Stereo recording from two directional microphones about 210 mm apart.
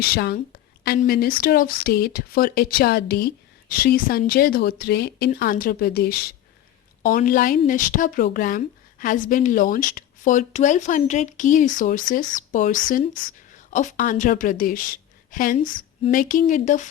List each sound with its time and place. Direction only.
0.0 s a woman's voice: 50° left (ahead or behind)